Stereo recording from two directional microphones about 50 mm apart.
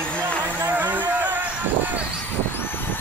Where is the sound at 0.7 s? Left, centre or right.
Right.